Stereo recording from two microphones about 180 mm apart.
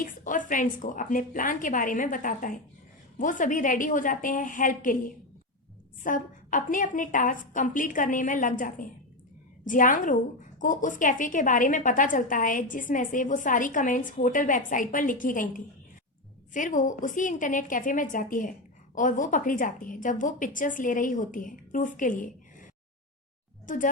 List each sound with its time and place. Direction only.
0.0 s a woman's voice: 45° left (ahead or behind)
23.6 s speech: 45° left (ahead or behind)